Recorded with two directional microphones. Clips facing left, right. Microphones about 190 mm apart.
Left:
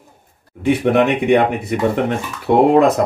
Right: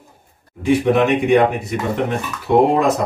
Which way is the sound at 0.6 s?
60° left (ahead or behind).